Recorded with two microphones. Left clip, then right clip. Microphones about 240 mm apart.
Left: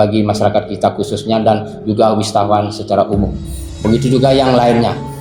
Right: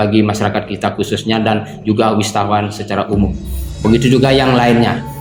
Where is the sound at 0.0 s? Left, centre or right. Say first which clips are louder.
Left 2 dB; right.